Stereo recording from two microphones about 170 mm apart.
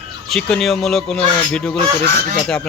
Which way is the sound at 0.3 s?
5° left (ahead or behind).